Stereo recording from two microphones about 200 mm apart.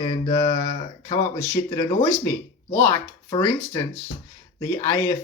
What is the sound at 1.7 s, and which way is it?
Speech, 20° left (ahead or behind).